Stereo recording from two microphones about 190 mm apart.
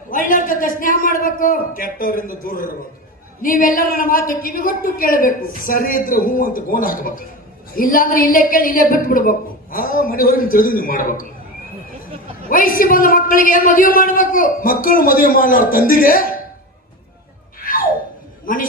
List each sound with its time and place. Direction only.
0.1 s a man's voice: 45° left (ahead or behind)
12.5 s a woman's voice: 45° left (ahead or behind)
17.6 s a sound: 50° left (ahead or behind)